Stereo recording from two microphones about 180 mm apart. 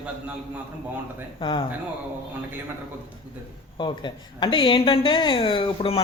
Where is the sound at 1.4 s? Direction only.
30° left (ahead or behind).